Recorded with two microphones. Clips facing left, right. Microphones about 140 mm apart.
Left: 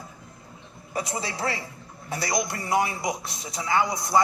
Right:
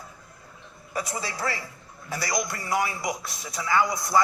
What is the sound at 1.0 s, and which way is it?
Speech, 25° left (ahead or behind).